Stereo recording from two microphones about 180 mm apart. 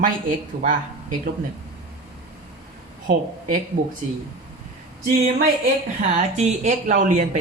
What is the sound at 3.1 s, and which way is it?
Speech, 45° right (ahead or behind).